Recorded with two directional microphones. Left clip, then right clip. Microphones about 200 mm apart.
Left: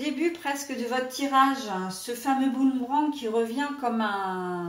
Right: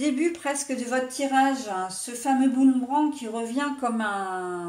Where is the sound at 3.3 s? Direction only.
45° right (ahead or behind).